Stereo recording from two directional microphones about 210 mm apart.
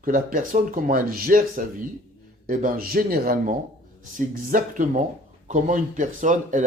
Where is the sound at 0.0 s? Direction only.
40° right (ahead or behind).